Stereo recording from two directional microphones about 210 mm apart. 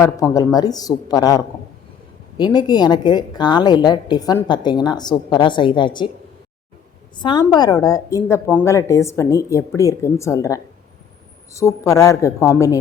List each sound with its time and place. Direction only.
0.0 s speech: 15° left (ahead or behind)
2.4 s a woman's voice: 20° left (ahead or behind)
7.2 s speech: 20° left (ahead or behind)